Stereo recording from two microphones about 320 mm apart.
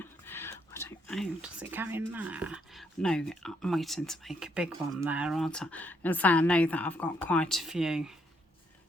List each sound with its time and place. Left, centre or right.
0.0 s speech: centre